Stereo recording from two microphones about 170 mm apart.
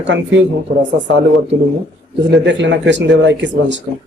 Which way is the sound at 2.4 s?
90° right.